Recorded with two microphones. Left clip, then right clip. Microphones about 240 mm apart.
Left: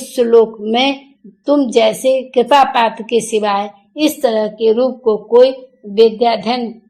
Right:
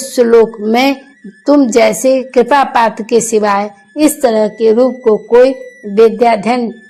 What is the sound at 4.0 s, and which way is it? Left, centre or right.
A woman's voice, right.